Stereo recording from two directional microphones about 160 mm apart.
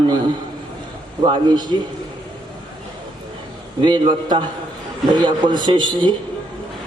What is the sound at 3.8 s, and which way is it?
Speech, 30° right (ahead or behind).